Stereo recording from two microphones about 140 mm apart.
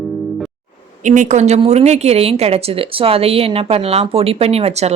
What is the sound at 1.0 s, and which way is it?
A woman's voice, 60° right (ahead or behind).